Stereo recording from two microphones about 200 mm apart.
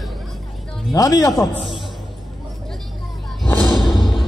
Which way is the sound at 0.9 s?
15° left (ahead or behind).